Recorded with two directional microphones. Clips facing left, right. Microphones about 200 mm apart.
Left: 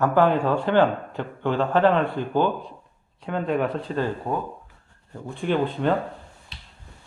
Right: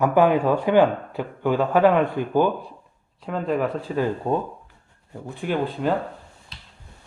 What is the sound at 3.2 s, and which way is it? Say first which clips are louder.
Speech: even; centre (ahead or behind).